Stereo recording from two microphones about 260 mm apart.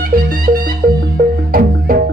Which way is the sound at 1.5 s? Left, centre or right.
Right.